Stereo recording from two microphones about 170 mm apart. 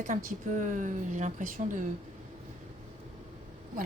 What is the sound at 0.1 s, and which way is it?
A woman's voice, 50° right (ahead or behind).